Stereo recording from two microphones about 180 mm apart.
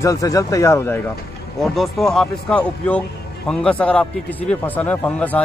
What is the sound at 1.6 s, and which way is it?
A man's voice, centre (ahead or behind).